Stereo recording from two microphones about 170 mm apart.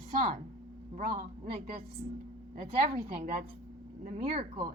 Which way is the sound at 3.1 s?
55° right (ahead or behind).